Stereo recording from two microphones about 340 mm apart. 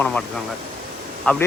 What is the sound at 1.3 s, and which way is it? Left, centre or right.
Speech, centre.